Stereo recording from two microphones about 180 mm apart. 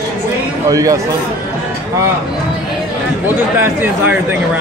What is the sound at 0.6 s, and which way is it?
Speech, 20° right (ahead or behind).